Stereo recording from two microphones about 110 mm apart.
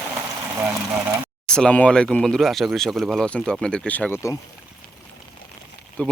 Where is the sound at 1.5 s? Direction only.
5° left (ahead or behind).